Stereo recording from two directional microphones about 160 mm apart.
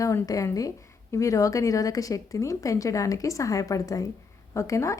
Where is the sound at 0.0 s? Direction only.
20° left (ahead or behind).